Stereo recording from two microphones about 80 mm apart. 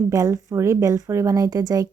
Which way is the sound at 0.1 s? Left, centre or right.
Right.